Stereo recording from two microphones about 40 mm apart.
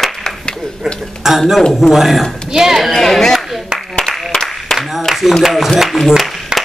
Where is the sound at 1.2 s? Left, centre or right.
Centre.